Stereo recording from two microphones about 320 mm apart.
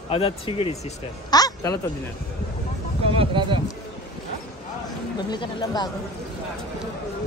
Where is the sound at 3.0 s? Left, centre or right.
Centre.